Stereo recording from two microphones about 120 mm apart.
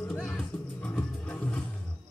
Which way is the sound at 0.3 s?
10° left (ahead or behind).